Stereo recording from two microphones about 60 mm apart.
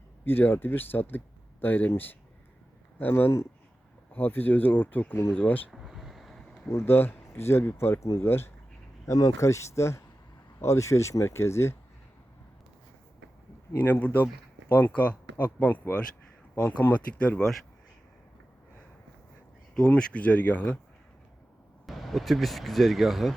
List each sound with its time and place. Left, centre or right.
0.3 s speech: left
3.0 s speech: left
5.7 s a sound: centre
6.7 s speech: left
9.0 s speech: left
9.4 s speech: left
13.7 s speech: left
19.7 s speech: centre
21.8 s speech: centre